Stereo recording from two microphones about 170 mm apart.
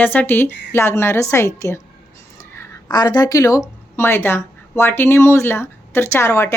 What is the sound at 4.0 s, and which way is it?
A woman's voice, 15° left (ahead or behind).